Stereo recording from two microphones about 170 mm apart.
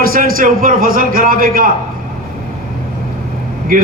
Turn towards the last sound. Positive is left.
turn(degrees=-55)  # may be behind; listen again after turning